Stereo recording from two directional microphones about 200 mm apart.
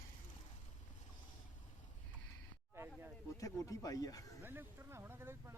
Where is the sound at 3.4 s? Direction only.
15° left (ahead or behind).